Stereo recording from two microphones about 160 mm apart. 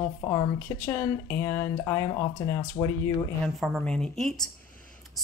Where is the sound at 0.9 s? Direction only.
15° left (ahead or behind).